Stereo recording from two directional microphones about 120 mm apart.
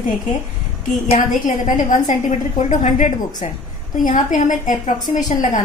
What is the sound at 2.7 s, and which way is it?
A woman's voice, 90° left.